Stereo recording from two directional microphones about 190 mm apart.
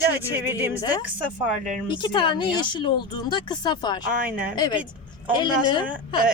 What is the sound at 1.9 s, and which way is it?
Speech, 25° left (ahead or behind).